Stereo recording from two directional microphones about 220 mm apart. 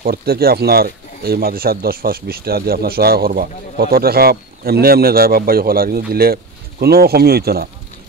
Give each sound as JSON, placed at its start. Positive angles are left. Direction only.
{"t": 0.0, "sound": "speech", "side_deg": -45}